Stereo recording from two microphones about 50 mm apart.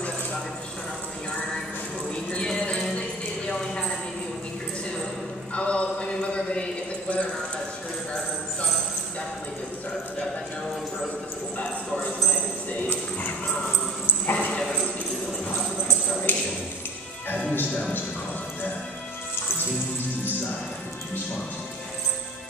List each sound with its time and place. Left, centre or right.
2.0 s a sound: left
5.5 s a sound: left
11.5 s clip-clop: left
14.2 s dog: left
14.6 s dog: centre
16.3 s ping: left
17.3 s music: left